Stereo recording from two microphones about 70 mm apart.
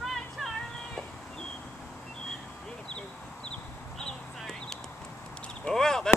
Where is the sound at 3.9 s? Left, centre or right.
Centre.